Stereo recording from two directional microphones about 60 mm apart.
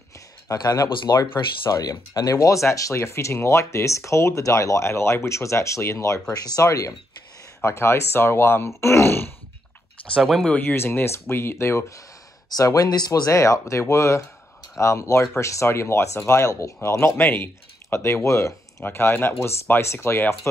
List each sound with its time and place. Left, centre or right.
0.5 s speech: left
6.3 s speech: left
7.6 s speech: left
10.7 s speech: left
12.4 s speech: left
18.9 s speech: left